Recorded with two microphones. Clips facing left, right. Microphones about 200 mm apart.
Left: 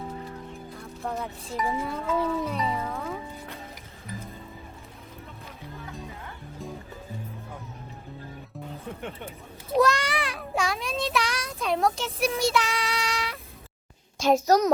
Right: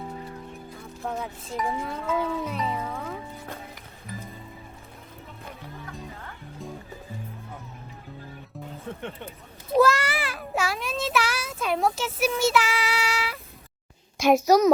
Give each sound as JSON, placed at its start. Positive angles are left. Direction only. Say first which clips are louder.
{"t": 0.8, "sound": "speech", "louder": "even", "side_deg": 0}
{"t": 4.0, "sound": "music", "louder": "even", "side_deg": 0}
{"t": 9.7, "sound": "child singing", "louder": "right 2 dB", "side_deg": 0}
{"t": 14.2, "sound": "a child's voice", "louder": "right 2 dB", "side_deg": -10}